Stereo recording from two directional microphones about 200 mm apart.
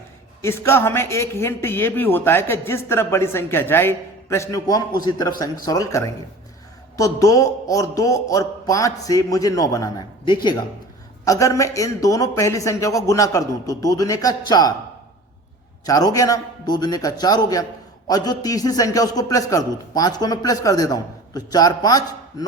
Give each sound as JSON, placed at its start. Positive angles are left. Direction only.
{"t": 0.4, "sound": "a man's voice", "side_deg": 10}
{"t": 15.9, "sound": "a man's voice", "side_deg": 20}